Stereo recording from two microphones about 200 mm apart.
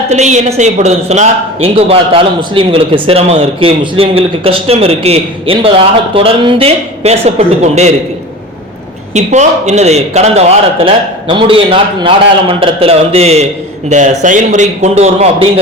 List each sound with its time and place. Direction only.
0.1 s a man's voice: 35° right (ahead or behind)
9.1 s a man's voice: 35° right (ahead or behind)